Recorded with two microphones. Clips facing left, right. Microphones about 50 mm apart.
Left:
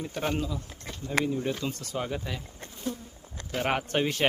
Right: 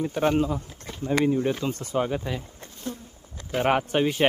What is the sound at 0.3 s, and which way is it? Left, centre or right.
Speech, right.